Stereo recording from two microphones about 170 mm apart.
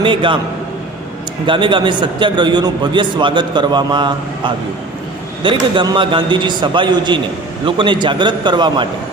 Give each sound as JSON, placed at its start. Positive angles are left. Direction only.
{"t": 0.0, "sound": "a man's voice", "side_deg": -30}
{"t": 1.5, "sound": "a man's voice", "side_deg": -30}